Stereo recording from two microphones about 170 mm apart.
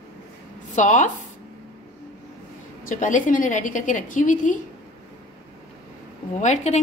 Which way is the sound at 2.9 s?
45° left (ahead or behind).